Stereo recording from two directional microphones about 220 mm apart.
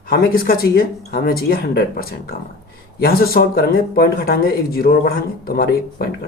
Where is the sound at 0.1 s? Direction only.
40° left (ahead or behind).